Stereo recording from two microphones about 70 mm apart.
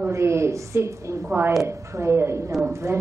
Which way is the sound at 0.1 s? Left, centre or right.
Right.